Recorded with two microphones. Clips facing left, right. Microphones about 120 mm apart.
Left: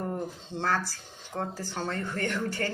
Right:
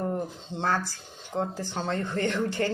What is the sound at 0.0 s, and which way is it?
Speech, 15° right (ahead or behind).